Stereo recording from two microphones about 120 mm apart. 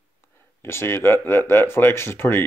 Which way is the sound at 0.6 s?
20° left (ahead or behind).